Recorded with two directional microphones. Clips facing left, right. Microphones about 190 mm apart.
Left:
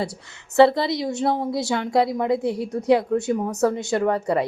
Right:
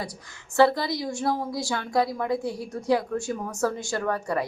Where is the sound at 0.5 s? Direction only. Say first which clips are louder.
Left 5 dB; 25° left (ahead or behind).